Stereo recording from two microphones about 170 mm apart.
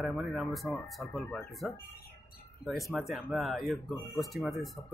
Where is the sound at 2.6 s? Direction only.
Centre (ahead or behind).